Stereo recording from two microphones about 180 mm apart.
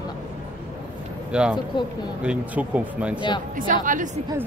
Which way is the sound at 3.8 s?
45° right (ahead or behind).